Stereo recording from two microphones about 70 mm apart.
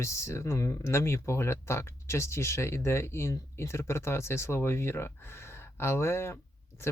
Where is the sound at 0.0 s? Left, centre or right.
Left.